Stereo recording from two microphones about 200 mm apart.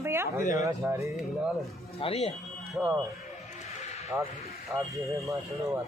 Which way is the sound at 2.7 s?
Centre (ahead or behind).